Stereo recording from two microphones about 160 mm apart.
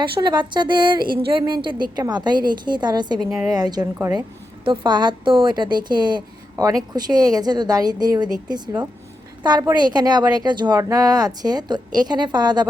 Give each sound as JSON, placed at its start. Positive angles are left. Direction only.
{"t": 0.0, "sound": "a woman's voice", "side_deg": -30}
{"t": 4.6, "sound": "a woman's voice", "side_deg": -30}